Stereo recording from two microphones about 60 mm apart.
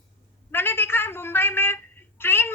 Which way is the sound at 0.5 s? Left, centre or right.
Left.